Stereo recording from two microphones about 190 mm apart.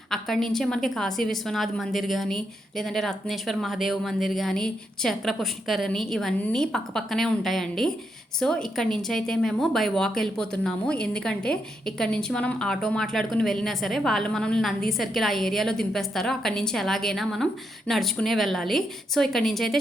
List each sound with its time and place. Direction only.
0.1 s speech: centre (ahead or behind)